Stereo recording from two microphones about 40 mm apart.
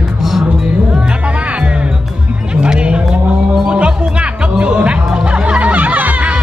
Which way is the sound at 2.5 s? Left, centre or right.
Right.